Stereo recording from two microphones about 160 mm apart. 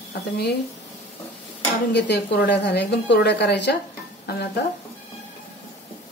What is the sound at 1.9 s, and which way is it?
A woman's voice, 90° left.